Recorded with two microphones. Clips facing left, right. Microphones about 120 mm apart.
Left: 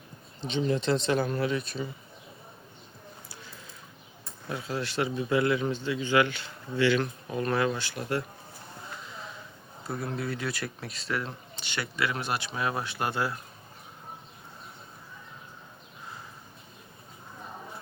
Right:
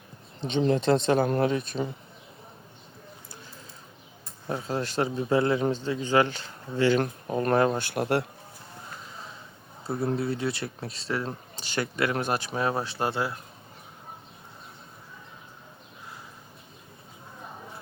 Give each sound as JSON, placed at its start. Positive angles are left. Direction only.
{"t": 0.4, "sound": "speech", "side_deg": -50}
{"t": 4.4, "sound": "speech", "side_deg": -40}
{"t": 7.9, "sound": "speech", "side_deg": -60}
{"t": 10.0, "sound": "speech", "side_deg": -30}